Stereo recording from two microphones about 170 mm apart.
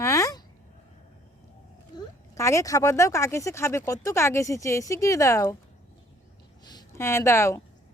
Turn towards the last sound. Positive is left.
turn(degrees=15)  # may be behind; listen again after turning